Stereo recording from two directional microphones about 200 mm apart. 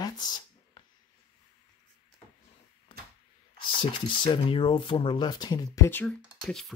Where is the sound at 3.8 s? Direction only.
25° left (ahead or behind); by 6.7 s centre (ahead or behind).